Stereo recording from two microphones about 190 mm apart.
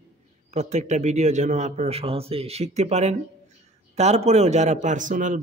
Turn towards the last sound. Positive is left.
turn(degrees=-40)  # may be behind; listen again after turning